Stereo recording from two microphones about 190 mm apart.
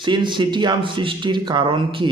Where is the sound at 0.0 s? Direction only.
25° right (ahead or behind).